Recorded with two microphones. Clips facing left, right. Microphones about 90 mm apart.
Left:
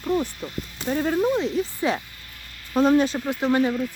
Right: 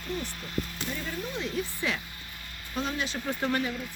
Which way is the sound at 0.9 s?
55° left (ahead or behind).